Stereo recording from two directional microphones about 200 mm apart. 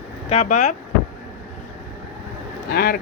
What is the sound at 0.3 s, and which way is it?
Speech, 35° left (ahead or behind).